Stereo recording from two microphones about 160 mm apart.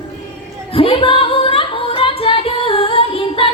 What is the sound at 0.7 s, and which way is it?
Music, 35° left (ahead or behind).